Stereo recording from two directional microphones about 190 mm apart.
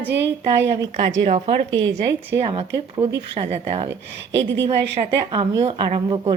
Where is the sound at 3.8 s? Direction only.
70° right (ahead or behind).